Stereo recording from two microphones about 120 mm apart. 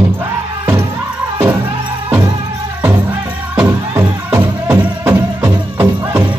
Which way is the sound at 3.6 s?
20° right (ahead or behind).